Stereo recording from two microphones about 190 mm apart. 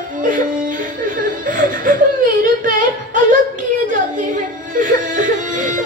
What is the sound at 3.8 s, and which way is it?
Music, 45° right (ahead or behind).